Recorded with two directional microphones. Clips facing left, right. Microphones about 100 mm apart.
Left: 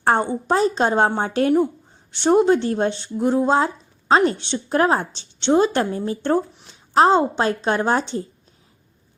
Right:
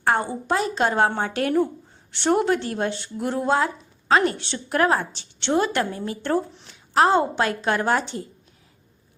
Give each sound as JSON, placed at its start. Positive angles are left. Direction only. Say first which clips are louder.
{"t": 0.0, "sound": "a woman's voice", "louder": "left 3 dB", "side_deg": 25}